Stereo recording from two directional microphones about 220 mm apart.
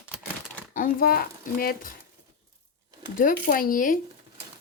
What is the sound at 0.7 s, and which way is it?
Speech, 40° left (ahead or behind).